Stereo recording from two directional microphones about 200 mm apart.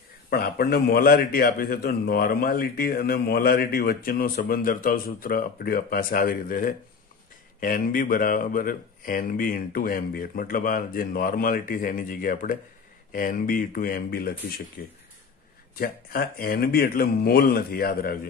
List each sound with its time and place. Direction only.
0.3 s a man's voice: 50° left (ahead or behind)